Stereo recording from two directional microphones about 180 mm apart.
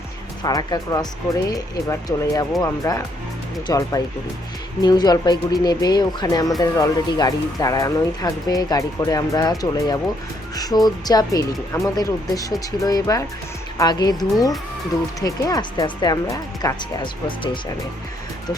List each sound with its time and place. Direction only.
0.4 s speech: 20° left (ahead or behind)